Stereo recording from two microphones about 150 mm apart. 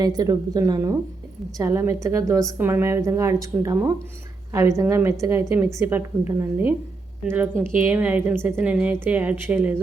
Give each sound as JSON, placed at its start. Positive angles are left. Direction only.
{"t": 0.0, "sound": "a woman's voice", "side_deg": -25}